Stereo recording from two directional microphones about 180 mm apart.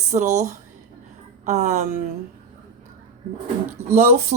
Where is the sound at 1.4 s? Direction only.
40° right (ahead or behind).